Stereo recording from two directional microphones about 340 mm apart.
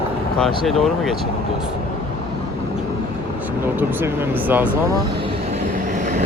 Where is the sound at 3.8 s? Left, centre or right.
Centre.